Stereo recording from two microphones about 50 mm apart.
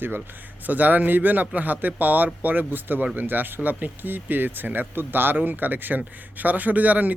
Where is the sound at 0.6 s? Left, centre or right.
Right.